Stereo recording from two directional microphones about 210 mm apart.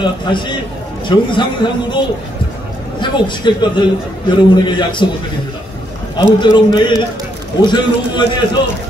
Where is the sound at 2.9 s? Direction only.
20° left (ahead or behind).